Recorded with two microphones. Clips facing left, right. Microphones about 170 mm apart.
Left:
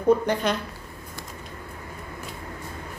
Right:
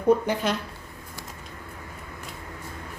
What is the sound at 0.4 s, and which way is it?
Speech, 5° right (ahead or behind).